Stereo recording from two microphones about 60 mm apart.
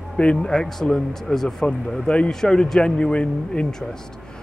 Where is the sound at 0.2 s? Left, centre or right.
Centre.